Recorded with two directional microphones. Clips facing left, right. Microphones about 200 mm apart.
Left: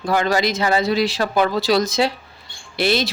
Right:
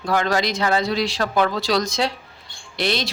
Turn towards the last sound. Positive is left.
turn(degrees=5)  # may be behind; listen again after turning